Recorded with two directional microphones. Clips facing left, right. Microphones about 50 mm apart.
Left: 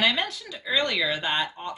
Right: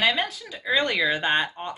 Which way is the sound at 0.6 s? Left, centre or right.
Right.